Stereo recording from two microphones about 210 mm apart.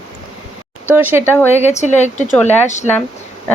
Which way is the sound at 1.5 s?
30° left (ahead or behind).